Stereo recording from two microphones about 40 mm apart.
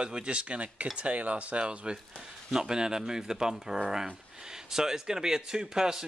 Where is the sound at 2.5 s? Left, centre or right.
Centre.